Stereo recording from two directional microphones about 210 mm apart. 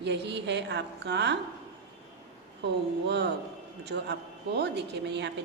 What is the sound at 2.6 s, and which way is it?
A woman's voice, 55° right (ahead or behind).